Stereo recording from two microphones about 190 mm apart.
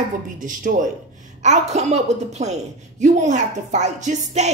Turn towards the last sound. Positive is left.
turn(degrees=-35)  # may be behind; listen again after turning